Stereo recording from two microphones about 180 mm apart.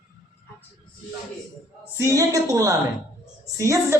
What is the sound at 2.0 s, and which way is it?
A woman's voice, 20° right (ahead or behind).